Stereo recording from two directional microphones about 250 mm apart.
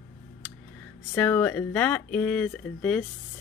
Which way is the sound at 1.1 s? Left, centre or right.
Centre.